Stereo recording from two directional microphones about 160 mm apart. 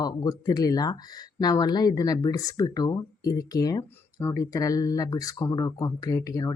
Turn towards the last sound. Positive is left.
turn(degrees=20)  # may be behind; listen again after turning